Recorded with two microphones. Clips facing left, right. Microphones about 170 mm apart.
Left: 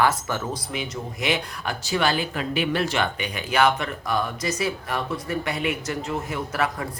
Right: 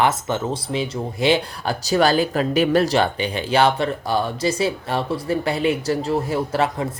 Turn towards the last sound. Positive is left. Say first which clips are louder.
# right 5 dB
turn(degrees=-30)  # may be behind; listen again after turning